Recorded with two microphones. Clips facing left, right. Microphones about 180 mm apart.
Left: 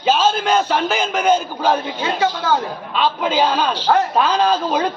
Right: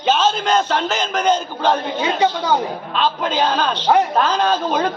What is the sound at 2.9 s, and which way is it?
A man's voice, 5° left (ahead or behind).